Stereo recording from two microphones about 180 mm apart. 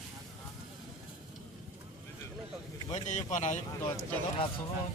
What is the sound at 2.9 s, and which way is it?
Speech, 40° left (ahead or behind).